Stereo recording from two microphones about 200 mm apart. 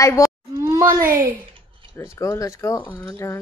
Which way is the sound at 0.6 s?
15° right (ahead or behind).